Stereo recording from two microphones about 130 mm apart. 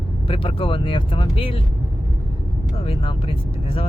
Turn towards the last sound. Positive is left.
turn(degrees=45)  # may be behind; listen again after turning